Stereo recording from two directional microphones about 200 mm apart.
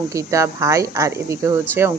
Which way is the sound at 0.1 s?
15° right (ahead or behind).